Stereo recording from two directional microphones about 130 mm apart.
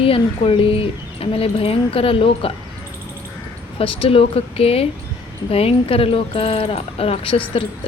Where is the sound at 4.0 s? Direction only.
45° left (ahead or behind).